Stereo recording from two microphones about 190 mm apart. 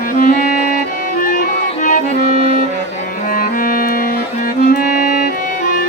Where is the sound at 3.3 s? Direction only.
50° left (ahead or behind).